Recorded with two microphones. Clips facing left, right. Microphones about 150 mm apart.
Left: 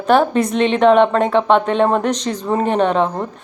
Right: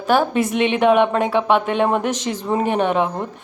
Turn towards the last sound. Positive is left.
turn(degrees=-10)  # may be behind; listen again after turning